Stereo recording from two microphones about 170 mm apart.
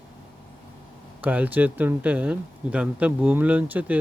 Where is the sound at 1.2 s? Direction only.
10° right (ahead or behind).